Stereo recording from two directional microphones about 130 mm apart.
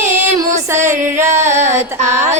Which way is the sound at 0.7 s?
20° right (ahead or behind).